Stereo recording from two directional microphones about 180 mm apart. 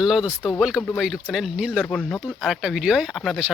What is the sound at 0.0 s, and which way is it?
Speech, centre (ahead or behind).